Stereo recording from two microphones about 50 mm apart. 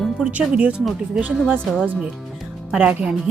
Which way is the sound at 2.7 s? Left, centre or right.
Centre.